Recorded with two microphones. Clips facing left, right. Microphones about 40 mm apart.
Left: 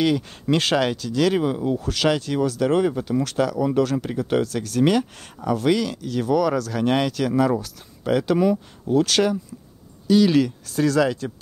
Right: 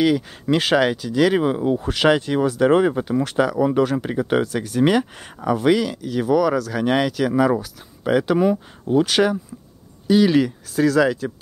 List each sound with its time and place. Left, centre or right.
0.0 s speech: centre
10.7 s speech: centre